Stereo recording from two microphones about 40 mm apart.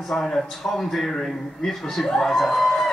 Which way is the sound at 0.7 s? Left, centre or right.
Centre.